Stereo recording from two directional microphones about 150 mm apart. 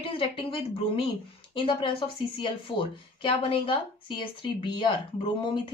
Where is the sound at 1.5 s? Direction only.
35° left (ahead or behind).